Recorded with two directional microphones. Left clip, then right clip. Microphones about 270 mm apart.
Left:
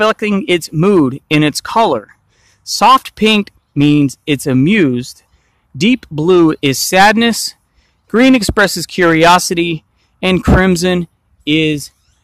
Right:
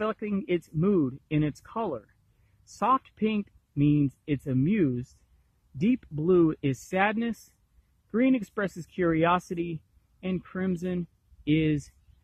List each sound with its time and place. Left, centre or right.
0.0 s speech: centre
11.4 s speech: centre